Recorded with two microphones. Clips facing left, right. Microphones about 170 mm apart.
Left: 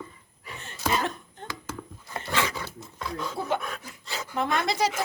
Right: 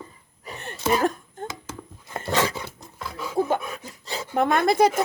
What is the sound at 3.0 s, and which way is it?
Dog, 5° right (ahead or behind).